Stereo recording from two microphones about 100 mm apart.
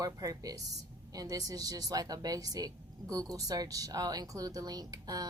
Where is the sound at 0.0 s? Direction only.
40° right (ahead or behind).